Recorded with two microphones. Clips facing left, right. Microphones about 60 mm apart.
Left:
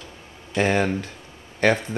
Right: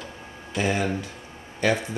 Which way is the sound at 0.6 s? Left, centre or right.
Left.